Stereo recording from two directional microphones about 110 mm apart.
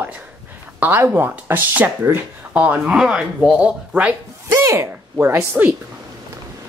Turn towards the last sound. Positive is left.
turn(degrees=-20)  # may be behind; listen again after turning